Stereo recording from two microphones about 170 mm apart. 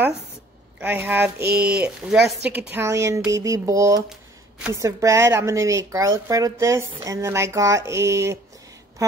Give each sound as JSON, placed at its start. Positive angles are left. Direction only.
{"t": 0.7, "sound": "a woman's voice", "side_deg": -10}